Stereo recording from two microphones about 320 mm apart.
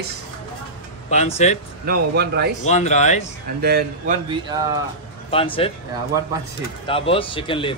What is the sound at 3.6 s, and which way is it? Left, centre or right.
Speech, right.